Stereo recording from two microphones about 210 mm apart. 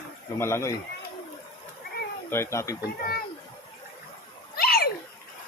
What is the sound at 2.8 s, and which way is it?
Speech, 45° left (ahead or behind).